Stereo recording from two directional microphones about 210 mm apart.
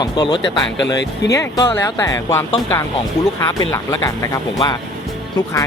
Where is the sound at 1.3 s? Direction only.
20° left (ahead or behind).